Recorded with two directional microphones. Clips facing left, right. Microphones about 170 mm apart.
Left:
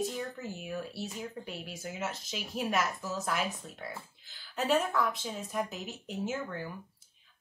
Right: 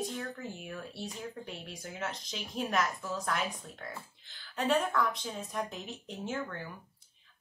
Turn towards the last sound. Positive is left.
turn(degrees=5)  # may be behind; listen again after turning